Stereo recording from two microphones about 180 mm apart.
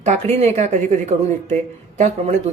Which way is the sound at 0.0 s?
35° right (ahead or behind).